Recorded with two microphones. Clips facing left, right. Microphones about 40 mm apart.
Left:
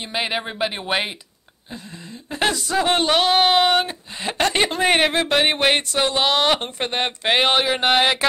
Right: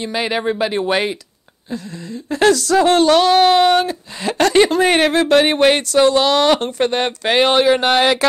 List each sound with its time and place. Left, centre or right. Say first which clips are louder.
0.0 s speech: right 5 dB; left
2.2 s speech: right 8 dB; centre